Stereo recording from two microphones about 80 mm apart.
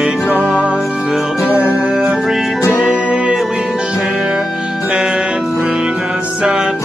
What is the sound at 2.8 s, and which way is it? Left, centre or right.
Music, centre.